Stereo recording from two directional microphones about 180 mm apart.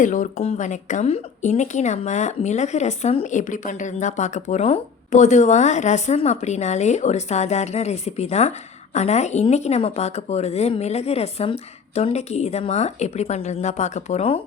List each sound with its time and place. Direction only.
0.0 s a woman's voice: 45° left (ahead or behind)